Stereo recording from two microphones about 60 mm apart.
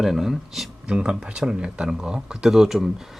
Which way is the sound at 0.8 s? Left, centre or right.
Centre.